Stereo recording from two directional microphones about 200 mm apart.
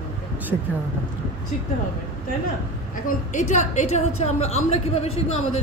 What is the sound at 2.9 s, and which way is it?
A woman's voice, 40° left (ahead or behind).